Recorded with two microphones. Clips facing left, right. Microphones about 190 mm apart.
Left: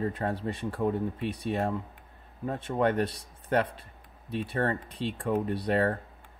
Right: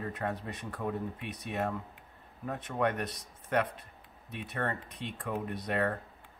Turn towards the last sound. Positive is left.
turn(degrees=30)  # may be behind; listen again after turning